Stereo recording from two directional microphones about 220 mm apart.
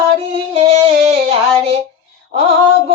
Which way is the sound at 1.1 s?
25° right (ahead or behind).